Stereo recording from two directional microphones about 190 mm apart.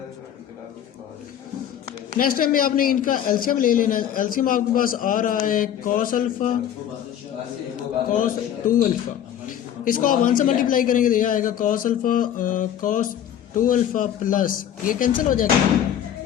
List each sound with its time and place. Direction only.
2.1 s a man's voice: 50° left (ahead or behind)
8.1 s a man's voice: 45° left (ahead or behind)